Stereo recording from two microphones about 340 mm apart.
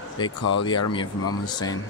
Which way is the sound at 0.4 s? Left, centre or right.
Left.